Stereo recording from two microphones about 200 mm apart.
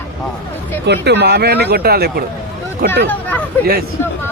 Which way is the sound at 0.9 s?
55° right (ahead or behind).